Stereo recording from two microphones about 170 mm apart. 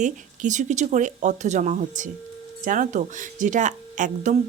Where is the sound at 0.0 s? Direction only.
45° right (ahead or behind).